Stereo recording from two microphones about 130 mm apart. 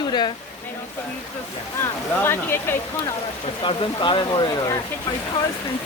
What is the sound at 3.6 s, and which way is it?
Speech, 40° left (ahead or behind).